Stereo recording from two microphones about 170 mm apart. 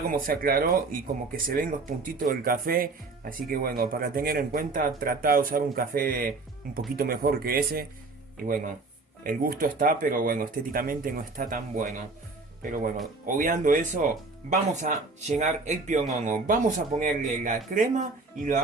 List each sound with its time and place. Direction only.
0.1 s speech: 60° right (ahead or behind)
9.2 s speech: 55° right (ahead or behind)
13.2 s speech: 50° right (ahead or behind)